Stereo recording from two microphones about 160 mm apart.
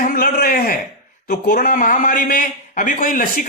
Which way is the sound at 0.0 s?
65° left (ahead or behind).